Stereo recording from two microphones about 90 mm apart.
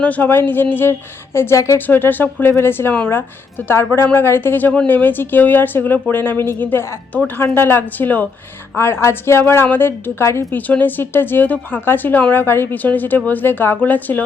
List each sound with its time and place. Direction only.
0.0 s speech: 20° left (ahead or behind)